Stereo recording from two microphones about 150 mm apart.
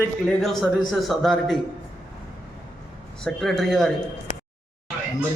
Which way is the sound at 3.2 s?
5° left (ahead or behind).